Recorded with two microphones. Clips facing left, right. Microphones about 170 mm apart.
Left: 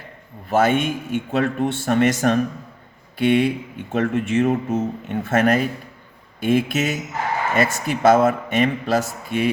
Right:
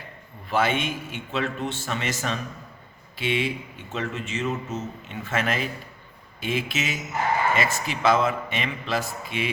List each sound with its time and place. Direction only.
0.4 s speech: 45° left (ahead or behind)